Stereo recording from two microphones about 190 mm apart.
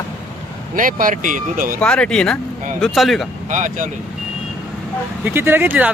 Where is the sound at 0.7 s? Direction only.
45° right (ahead or behind).